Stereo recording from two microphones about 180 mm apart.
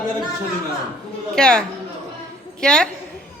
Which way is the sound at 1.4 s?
5° left (ahead or behind).